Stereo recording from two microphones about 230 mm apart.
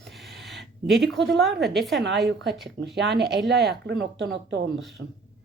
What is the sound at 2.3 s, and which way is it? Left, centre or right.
Speech, right.